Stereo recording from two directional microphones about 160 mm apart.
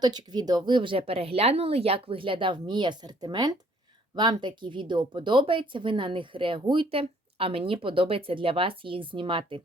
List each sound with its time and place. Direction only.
0.0 s speech: 25° right (ahead or behind)